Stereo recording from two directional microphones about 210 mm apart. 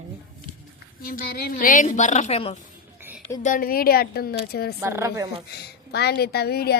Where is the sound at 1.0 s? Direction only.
45° left (ahead or behind).